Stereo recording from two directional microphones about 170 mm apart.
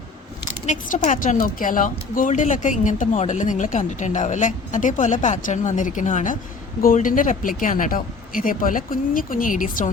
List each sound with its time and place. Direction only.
0.6 s a woman's voice: 45° left (ahead or behind)